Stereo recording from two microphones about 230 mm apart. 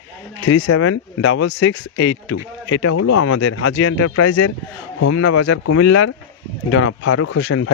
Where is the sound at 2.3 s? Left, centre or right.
Left.